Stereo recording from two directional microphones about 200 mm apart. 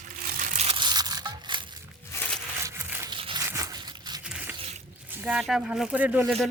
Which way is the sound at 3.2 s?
25° right (ahead or behind).